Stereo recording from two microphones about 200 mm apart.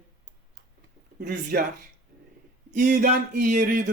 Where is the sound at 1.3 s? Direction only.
45° right (ahead or behind).